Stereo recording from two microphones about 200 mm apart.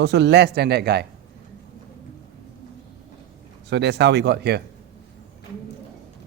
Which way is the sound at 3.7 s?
60° right (ahead or behind).